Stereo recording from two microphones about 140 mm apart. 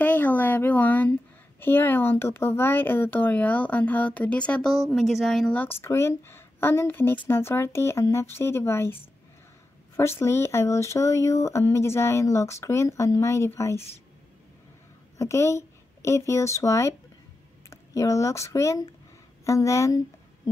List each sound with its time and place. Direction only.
0.0 s a sound: 10° left (ahead or behind)
1.6 s speech: 15° left (ahead or behind)
15.1 s speech: 20° left (ahead or behind)